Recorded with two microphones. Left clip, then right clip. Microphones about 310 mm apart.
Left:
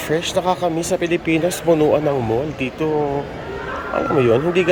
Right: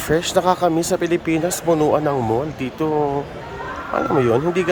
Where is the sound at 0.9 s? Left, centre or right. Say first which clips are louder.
Left 1 dB; centre.